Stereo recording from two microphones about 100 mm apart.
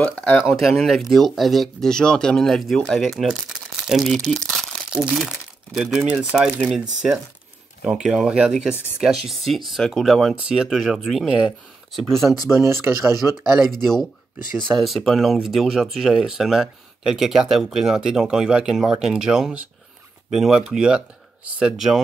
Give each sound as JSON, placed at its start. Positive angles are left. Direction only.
{"t": 0.0, "sound": "speech", "side_deg": 10}
{"t": 0.6, "sound": "speech", "side_deg": 0}
{"t": 4.8, "sound": "speech", "side_deg": -5}
{"t": 12.4, "sound": "speech", "side_deg": -25}
{"t": 14.6, "sound": "speech", "side_deg": 5}